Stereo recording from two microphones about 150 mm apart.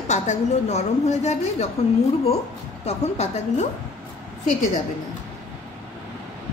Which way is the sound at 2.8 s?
45° left (ahead or behind).